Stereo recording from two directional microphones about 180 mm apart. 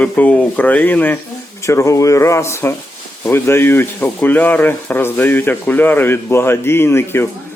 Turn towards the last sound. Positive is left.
turn(degrees=15)  # may be behind; listen again after turning